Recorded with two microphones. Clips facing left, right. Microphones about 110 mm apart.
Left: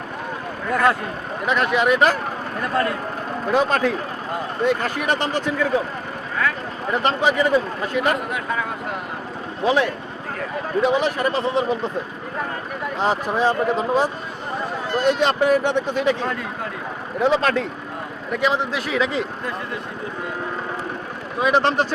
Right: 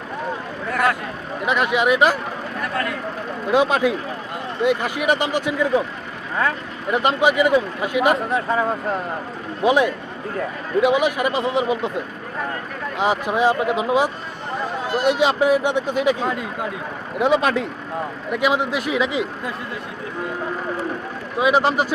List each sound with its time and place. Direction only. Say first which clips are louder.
1.5 s speech: even; 10° right (ahead or behind)
2.6 s speech: left 4 dB; 30° left (ahead or behind)
3.5 s speech: right 2 dB; 10° right (ahead or behind)
6.9 s speech: right 2 dB; 10° right (ahead or behind)
8.1 s speech: right 4 dB; 30° right (ahead or behind)
9.6 s speech: right 2 dB; 15° right (ahead or behind)
13.0 s speech: right 2 dB; 10° right (ahead or behind)
21.4 s speech: right 1 dB; 5° right (ahead or behind)